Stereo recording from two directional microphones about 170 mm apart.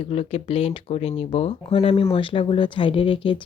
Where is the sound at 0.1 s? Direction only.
35° left (ahead or behind).